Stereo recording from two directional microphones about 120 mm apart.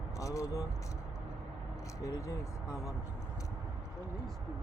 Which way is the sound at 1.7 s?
25° left (ahead or behind).